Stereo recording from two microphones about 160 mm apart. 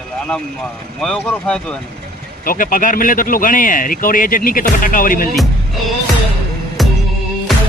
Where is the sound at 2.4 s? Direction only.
60° left (ahead or behind).